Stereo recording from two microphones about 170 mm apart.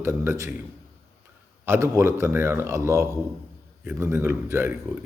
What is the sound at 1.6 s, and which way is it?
Speech, 15° right (ahead or behind).